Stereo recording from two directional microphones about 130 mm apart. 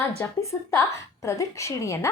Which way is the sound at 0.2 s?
25° left (ahead or behind).